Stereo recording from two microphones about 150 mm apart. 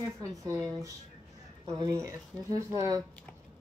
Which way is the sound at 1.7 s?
25° right (ahead or behind).